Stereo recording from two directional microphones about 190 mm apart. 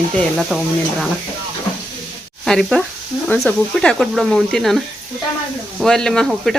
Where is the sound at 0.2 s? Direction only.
Centre (ahead or behind).